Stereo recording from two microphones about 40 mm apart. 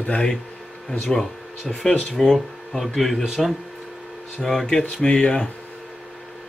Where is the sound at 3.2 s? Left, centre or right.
Centre.